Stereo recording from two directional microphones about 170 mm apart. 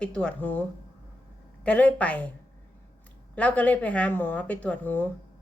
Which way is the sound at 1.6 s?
10° left (ahead or behind).